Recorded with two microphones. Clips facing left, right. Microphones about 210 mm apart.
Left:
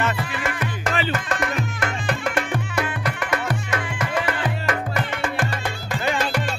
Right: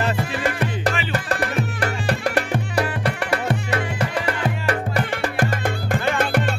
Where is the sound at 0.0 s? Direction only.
35° right (ahead or behind).